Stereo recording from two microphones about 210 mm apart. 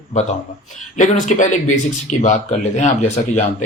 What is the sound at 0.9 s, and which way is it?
Speech, 35° left (ahead or behind).